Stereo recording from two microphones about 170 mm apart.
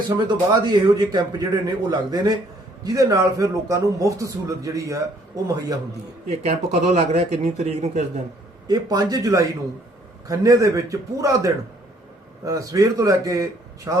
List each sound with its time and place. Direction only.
0.3 s a man's voice: 25° right (ahead or behind)
6.3 s a man's voice: 40° right (ahead or behind)
8.6 s a man's voice: 25° right (ahead or behind)